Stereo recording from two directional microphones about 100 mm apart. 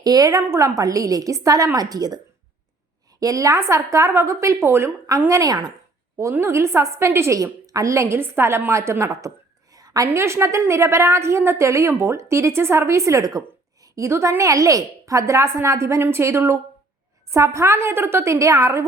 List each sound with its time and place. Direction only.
0.0 s a woman's voice: 40° right (ahead or behind)
9.7 s a sound: 40° right (ahead or behind)
10.2 s a woman's voice: 30° right (ahead or behind)